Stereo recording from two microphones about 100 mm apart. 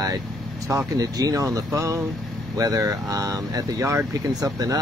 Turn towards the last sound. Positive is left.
turn(degrees=-35)  # may be behind; listen again after turning